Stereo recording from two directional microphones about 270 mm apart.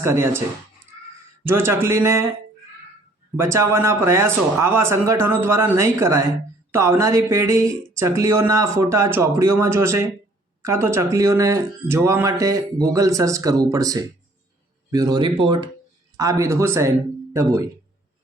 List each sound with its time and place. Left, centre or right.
0.0 s speech: centre
1.5 s speech: centre
3.3 s speech: centre